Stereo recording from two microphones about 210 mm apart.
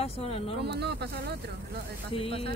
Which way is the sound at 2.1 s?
25° left (ahead or behind).